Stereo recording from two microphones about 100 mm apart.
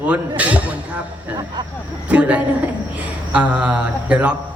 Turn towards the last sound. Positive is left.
turn(degrees=-10)  # may be behind; listen again after turning